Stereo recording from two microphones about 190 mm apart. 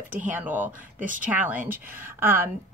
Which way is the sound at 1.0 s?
45° right (ahead or behind).